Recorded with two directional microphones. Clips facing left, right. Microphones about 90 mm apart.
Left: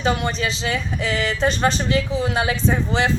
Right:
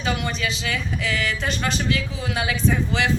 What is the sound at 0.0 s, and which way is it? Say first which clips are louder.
Speech: left 4 dB; 30° left (ahead or behind).